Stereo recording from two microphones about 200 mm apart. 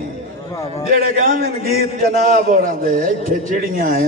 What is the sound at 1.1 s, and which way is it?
A man's voice, 45° right (ahead or behind).